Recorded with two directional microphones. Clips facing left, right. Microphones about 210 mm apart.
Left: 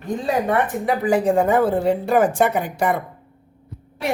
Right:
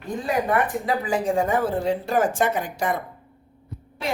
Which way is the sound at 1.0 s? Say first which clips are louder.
Left 8 dB; 60° left (ahead or behind).